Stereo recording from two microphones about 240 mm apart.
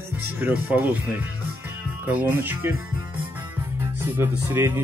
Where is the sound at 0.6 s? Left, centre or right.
Centre.